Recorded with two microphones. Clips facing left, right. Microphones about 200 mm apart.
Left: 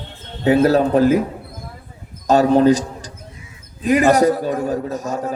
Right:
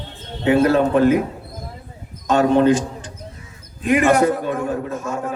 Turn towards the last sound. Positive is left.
turn(degrees=35)  # may be behind; listen again after turning